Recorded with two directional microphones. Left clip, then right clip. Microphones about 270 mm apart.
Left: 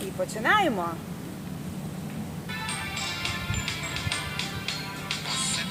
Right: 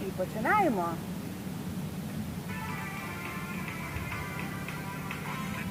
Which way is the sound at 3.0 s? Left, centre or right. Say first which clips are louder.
Left 7 dB; left.